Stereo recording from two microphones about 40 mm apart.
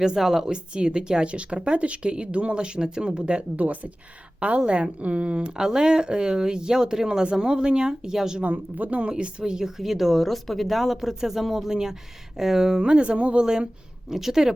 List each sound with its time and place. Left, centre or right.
0.2 s speech: centre
0.5 s speech: right
3.6 s speech: right; by 8.4 s centre
8.4 s speech: right
9.4 s speech: centre
12.8 s speech: right
13.4 s speech: centre